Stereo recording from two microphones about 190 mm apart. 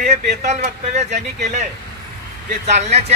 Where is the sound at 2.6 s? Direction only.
35° right (ahead or behind).